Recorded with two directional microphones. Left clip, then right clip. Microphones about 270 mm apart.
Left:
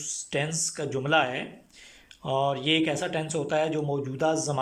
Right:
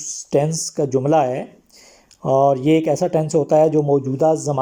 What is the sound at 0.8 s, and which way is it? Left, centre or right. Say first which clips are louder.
Speech: right 9 dB; centre.